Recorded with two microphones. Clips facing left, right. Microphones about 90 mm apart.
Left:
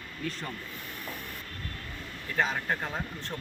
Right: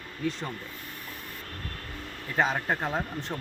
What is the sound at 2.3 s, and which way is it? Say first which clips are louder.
Speech: right 3 dB; 30° right (ahead or behind).